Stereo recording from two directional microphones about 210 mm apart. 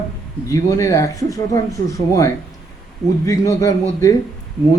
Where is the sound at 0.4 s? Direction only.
15° left (ahead or behind).